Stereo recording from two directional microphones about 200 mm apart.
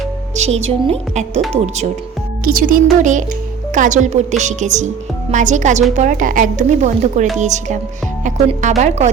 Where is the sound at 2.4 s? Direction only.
45° right (ahead or behind).